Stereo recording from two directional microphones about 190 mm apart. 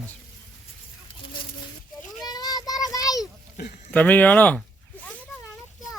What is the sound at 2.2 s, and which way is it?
Child singing, 20° left (ahead or behind).